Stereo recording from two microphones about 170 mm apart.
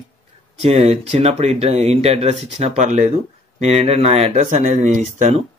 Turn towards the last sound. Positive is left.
turn(degrees=-45)  # may be behind; listen again after turning